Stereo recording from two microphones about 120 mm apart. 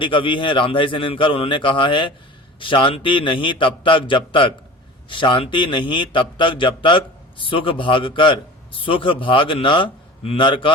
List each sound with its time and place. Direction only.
0.0 s a man's voice: 45° left (ahead or behind)